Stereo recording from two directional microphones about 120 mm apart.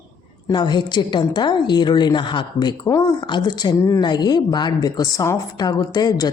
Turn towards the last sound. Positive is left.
turn(degrees=35)  # may be behind; listen again after turning